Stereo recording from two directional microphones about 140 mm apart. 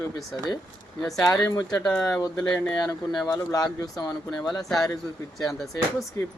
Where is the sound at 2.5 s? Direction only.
10° left (ahead or behind).